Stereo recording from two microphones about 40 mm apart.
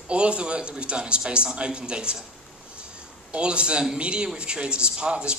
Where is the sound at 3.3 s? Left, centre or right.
Right.